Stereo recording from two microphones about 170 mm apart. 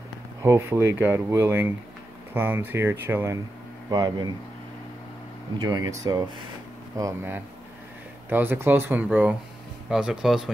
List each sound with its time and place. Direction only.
0.4 s speech: 15° right (ahead or behind)
5.6 s speech: 25° right (ahead or behind); by 10.5 s 5° right (ahead or behind)